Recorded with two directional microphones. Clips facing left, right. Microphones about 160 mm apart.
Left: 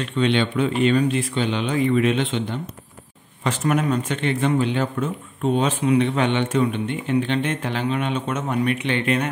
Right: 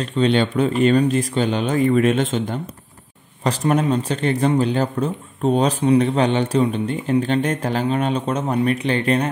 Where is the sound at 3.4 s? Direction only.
30° right (ahead or behind).